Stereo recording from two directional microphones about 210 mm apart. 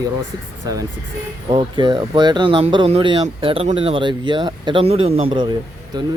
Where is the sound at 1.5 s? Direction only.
25° right (ahead or behind).